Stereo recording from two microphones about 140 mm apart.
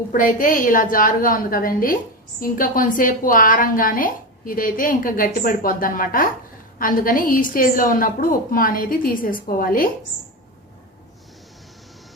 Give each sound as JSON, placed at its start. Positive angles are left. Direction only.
{"t": 0.1, "sound": "a woman's voice", "side_deg": 75}